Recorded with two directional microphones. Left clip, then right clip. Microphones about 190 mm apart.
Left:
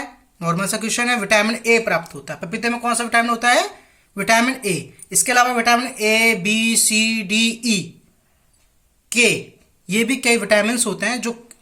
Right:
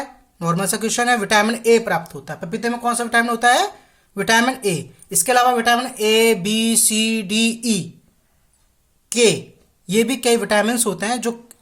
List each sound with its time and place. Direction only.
0.3 s speech: 45° right (ahead or behind)
9.0 s speech: 40° right (ahead or behind)